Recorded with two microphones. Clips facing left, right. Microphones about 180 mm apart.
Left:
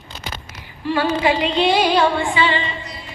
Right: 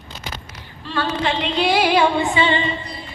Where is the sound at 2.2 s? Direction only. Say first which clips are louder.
Right 1 dB; 25° right (ahead or behind).